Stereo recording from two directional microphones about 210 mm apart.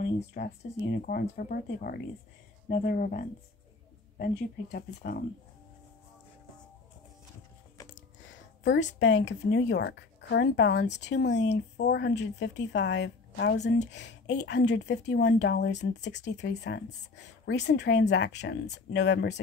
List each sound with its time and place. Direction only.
0.0 s speech: 55° left (ahead or behind)
7.9 s a sound: 60° left (ahead or behind)
9.0 s speech: 60° left (ahead or behind)